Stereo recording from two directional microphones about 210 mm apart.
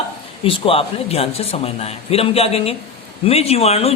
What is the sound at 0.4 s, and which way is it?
A man's voice, 25° left (ahead or behind).